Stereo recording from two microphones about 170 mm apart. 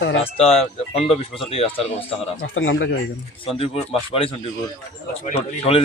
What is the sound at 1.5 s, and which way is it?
Speech, 35° left (ahead or behind).